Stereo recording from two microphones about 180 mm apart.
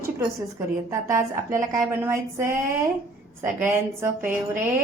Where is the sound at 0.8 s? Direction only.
15° right (ahead or behind).